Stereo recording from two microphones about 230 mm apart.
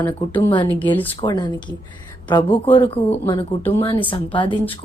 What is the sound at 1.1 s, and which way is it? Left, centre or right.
Speech, left.